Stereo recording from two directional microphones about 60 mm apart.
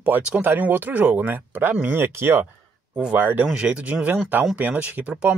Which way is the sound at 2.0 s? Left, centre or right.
Right.